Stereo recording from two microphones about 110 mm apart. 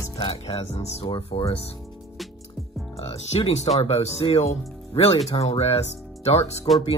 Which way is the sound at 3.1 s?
70° left (ahead or behind).